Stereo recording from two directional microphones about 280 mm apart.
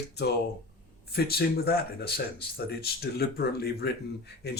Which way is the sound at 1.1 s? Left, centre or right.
Left.